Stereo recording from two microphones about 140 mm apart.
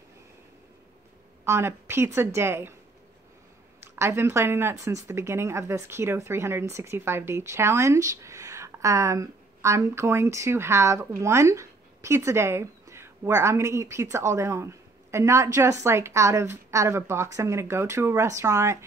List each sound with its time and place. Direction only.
1.4 s a woman's voice: 20° right (ahead or behind)
3.8 s speech: 15° right (ahead or behind)